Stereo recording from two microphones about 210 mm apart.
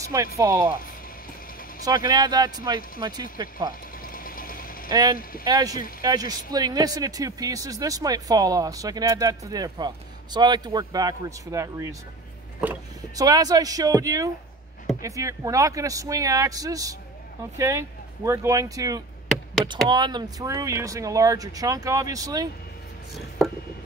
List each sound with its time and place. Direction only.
0.4 s speech: 15° right (ahead or behind)
1.9 s speech: 20° right (ahead or behind)
4.0 s vehicle: 40° left (ahead or behind)
5.4 s speech: 20° right (ahead or behind)
13.1 s speech: 15° right (ahead or behind)